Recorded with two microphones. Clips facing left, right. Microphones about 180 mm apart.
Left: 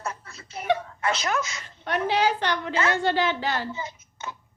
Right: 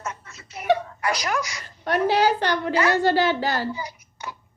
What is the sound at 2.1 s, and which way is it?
A woman's voice, 40° right (ahead or behind).